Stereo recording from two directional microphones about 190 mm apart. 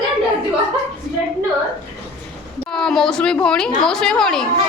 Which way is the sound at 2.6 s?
5° left (ahead or behind).